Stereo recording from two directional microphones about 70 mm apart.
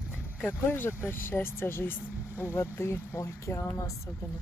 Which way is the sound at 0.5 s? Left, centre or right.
Left.